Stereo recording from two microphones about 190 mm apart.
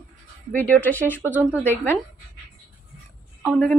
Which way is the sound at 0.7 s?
10° left (ahead or behind).